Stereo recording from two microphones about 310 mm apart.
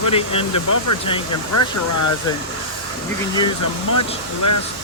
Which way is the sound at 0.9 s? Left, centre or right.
Left.